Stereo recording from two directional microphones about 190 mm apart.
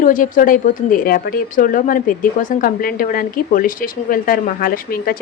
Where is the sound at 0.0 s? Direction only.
45° left (ahead or behind).